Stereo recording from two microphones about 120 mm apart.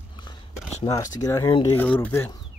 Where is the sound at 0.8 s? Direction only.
30° left (ahead or behind).